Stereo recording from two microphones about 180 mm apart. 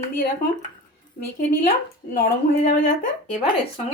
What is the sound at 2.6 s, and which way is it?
Speech, 50° left (ahead or behind).